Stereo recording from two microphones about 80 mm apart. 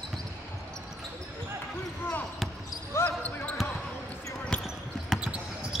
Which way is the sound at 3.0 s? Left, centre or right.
Centre.